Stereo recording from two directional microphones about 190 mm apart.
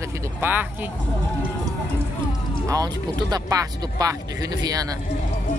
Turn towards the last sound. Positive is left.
turn(degrees=-20)  # may be behind; listen again after turning